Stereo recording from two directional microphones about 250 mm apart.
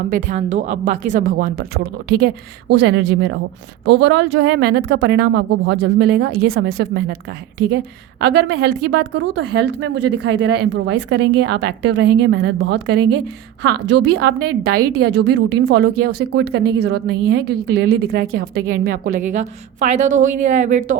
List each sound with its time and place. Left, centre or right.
0.1 s a woman's voice: right